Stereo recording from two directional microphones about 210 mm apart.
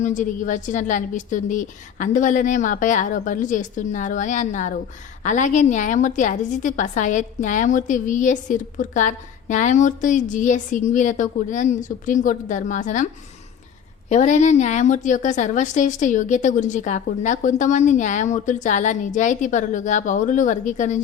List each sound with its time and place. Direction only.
0.0 s a woman's voice: 35° left (ahead or behind)
14.1 s a woman's voice: 35° left (ahead or behind)